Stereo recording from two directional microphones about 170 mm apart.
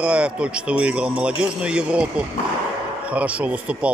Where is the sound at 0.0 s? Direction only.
5° right (ahead or behind).